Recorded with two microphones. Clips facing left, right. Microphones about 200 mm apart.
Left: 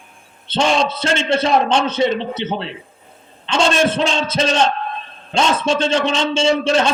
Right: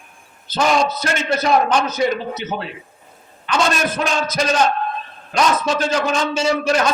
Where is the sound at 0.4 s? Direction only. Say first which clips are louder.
Even; 30° left (ahead or behind).